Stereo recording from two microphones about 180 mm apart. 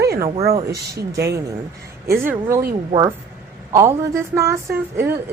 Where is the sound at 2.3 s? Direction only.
15° right (ahead or behind).